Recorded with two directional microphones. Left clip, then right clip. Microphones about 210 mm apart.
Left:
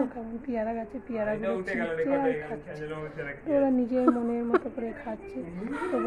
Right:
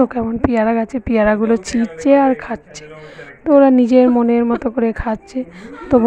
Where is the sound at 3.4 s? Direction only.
50° right (ahead or behind).